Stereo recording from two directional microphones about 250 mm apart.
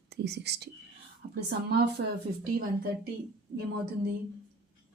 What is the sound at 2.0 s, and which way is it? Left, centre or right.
Speech, right.